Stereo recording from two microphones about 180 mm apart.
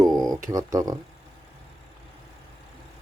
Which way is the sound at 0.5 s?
20° right (ahead or behind).